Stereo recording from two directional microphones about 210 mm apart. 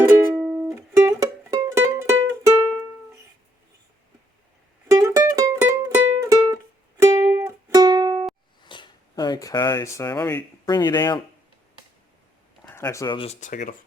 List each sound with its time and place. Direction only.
0.1 s music: 10° right (ahead or behind)
4.9 s music: 15° right (ahead or behind)
8.6 s speech: 20° left (ahead or behind)
12.6 s speech: 15° left (ahead or behind)
13.4 s speech: 40° left (ahead or behind)